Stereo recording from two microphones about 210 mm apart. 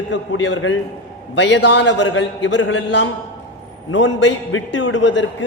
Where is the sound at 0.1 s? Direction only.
60° left (ahead or behind).